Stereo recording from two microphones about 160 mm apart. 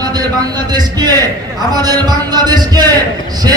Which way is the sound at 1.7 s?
25° right (ahead or behind).